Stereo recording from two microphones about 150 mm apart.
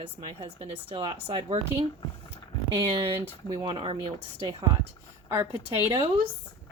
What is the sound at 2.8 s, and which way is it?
Speech, 35° right (ahead or behind).